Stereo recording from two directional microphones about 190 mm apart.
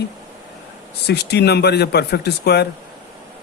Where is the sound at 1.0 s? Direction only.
60° left (ahead or behind).